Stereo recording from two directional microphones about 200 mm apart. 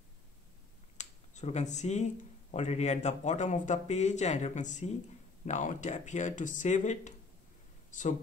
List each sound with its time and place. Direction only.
0.9 s finger snapping: 35° left (ahead or behind)
2.5 s speech: 35° left (ahead or behind)